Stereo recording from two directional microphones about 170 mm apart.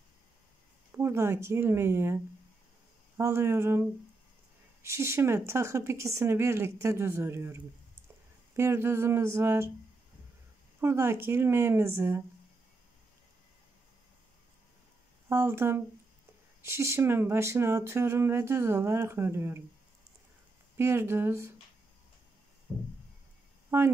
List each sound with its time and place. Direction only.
0.9 s speech: 15° right (ahead or behind)
3.2 s speech: 15° right (ahead or behind)
4.8 s speech: 15° right (ahead or behind)
10.8 s speech: 15° right (ahead or behind)
15.2 s speech: 15° right (ahead or behind)
20.7 s speech: 15° right (ahead or behind)
23.7 s a sound: 15° right (ahead or behind)